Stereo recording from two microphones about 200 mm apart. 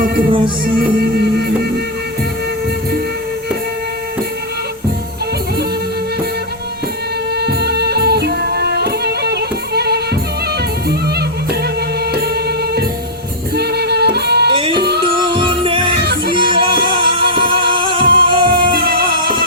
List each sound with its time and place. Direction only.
0.3 s music: 25° right (ahead or behind)
7.3 s music: 55° right (ahead or behind)
12.1 s music: 55° right (ahead or behind)
14.5 s music: 25° right (ahead or behind)
14.8 s music: 55° right (ahead or behind)
15.0 s music: 25° right (ahead or behind)
16.0 s music: 55° right (ahead or behind)
16.3 s music: 25° right (ahead or behind)
18.7 s music: 50° right (ahead or behind)